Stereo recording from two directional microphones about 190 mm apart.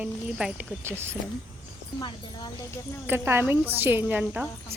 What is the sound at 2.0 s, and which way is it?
Speech, 25° left (ahead or behind).